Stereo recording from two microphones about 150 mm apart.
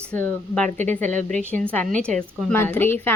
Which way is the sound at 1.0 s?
55° right (ahead or behind).